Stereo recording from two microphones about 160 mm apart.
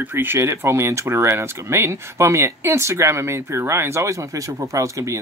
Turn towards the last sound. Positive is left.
turn(degrees=-20)  # may be behind; listen again after turning